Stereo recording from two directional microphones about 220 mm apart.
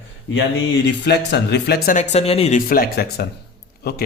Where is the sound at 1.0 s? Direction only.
50° left (ahead or behind); by 2.6 s 30° left (ahead or behind).